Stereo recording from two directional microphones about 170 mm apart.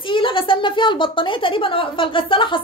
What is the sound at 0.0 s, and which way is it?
A woman's voice, 30° left (ahead or behind).